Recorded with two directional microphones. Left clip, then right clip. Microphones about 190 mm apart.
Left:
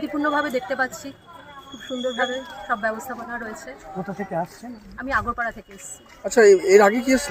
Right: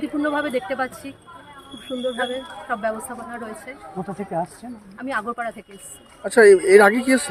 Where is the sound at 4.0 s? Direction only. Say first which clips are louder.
Right 1 dB; 25° left (ahead or behind).